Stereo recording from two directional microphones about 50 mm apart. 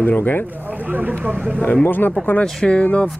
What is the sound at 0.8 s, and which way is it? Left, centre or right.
Speech, right.